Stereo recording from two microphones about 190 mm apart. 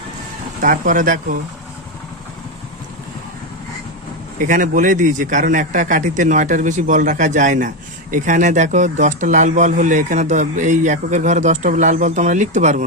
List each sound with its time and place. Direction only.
0.6 s speech: 45° right (ahead or behind)
4.4 s speech: 45° right (ahead or behind)